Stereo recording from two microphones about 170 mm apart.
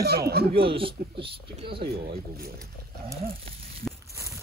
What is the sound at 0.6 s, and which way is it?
Speech, 30° right (ahead or behind).